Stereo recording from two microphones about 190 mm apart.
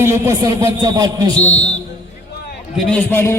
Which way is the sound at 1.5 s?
35° left (ahead or behind).